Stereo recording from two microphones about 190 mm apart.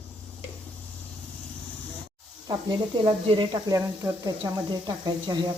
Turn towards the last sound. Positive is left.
turn(degrees=-25)  # may be behind; listen again after turning